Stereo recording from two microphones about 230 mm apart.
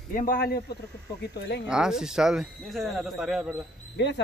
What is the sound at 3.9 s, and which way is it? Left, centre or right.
Speech, left.